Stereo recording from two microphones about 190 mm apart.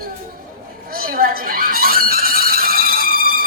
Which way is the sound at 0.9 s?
50° right (ahead or behind).